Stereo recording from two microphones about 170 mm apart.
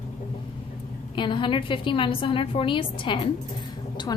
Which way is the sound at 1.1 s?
30° left (ahead or behind).